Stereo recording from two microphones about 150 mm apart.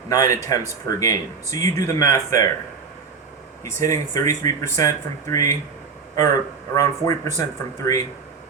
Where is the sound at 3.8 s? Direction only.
25° left (ahead or behind).